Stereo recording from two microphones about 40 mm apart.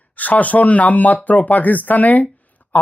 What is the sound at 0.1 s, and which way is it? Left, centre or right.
Speech, left.